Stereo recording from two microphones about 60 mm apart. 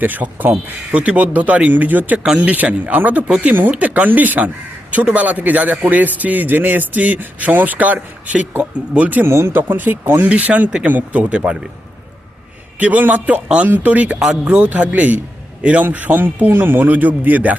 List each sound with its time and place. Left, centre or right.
0.0 s speech: right
0.9 s a man's voice: right
9.2 s a man's voice: right
12.8 s a man's voice: right